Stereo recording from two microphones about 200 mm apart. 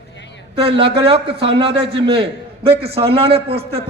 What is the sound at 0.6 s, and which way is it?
A man's voice, 25° right (ahead or behind).